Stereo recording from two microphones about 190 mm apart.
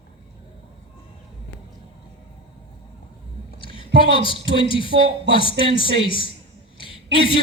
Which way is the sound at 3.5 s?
25° left (ahead or behind).